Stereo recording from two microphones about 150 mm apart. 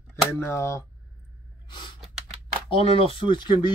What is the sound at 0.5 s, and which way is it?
Speech, 20° left (ahead or behind).